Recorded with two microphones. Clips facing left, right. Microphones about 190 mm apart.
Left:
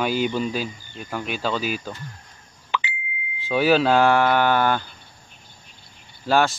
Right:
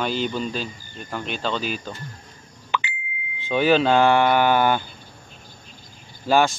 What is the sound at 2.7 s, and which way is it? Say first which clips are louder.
Beep: right 1 dB; 50° right (ahead or behind).